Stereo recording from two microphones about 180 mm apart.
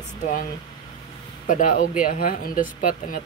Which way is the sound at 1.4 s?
45° left (ahead or behind).